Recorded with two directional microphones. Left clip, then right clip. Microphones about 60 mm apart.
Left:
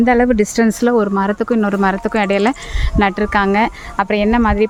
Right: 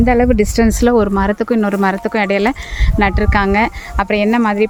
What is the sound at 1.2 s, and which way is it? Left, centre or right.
Speech, right.